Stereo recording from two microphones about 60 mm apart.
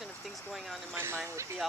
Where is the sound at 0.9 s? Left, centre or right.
Right.